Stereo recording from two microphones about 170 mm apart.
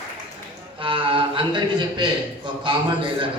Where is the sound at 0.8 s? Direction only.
30° right (ahead or behind).